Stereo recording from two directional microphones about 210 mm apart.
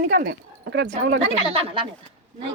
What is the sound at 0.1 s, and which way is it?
Speech, 50° right (ahead or behind).